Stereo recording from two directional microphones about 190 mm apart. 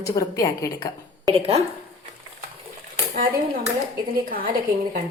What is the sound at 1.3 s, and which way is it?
Speech, 30° right (ahead or behind).